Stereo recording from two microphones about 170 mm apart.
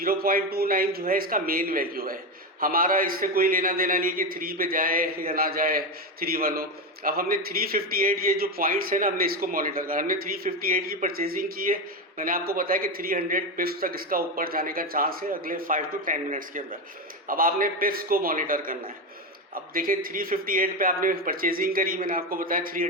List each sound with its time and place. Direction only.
0.0 s a man's voice: 60° right (ahead or behind)